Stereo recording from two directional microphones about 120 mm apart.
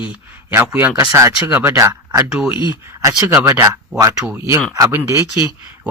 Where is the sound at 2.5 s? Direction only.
40° left (ahead or behind).